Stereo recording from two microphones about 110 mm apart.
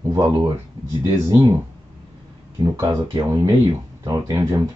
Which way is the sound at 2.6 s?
35° right (ahead or behind).